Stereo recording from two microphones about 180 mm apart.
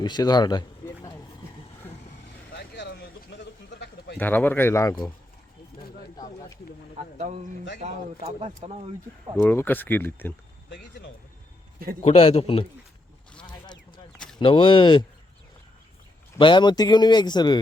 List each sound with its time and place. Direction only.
0.0 s a sound: 20° left (ahead or behind)
2.5 s a sound: 65° left (ahead or behind)
4.2 s a man's voice: 10° left (ahead or behind)
7.2 s speech: 40° right (ahead or behind)
9.4 s a man's voice: 10° left (ahead or behind)
12.0 s a man's voice: 35° left (ahead or behind)
13.5 s a sound: 25° left (ahead or behind)
14.3 s speech: 25° left (ahead or behind)
16.4 s speech: 25° left (ahead or behind)